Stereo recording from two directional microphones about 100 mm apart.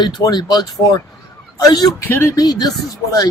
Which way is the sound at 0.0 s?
45° left (ahead or behind).